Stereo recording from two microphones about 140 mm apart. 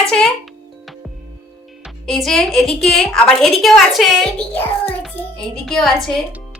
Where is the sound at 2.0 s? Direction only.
Centre (ahead or behind).